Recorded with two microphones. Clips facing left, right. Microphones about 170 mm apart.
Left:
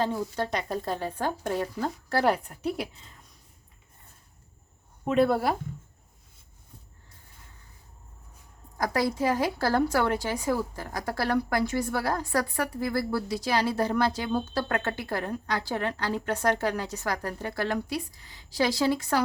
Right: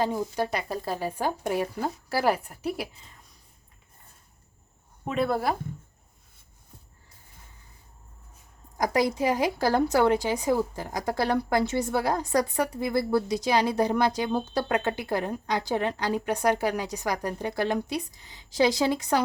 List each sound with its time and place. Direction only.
0.0 s speech: 15° right (ahead or behind)
5.0 s speech: centre (ahead or behind)
8.8 s a woman's voice: 20° right (ahead or behind)